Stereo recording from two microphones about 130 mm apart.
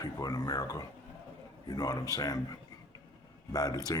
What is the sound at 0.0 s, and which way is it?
A man's voice, 30° left (ahead or behind).